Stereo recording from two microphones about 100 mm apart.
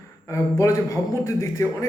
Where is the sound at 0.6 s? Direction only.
30° left (ahead or behind).